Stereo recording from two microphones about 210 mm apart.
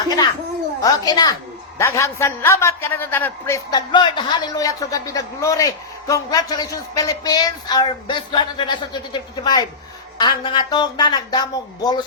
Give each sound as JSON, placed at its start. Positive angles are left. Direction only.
{"t": 0.8, "sound": "a man's voice", "side_deg": 20}